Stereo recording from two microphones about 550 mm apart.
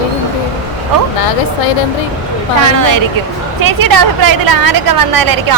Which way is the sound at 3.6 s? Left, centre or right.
Right.